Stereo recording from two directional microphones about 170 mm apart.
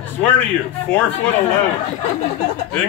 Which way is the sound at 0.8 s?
10° left (ahead or behind).